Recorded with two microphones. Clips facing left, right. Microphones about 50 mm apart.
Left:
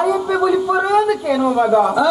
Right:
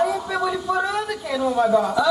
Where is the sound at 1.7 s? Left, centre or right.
Centre.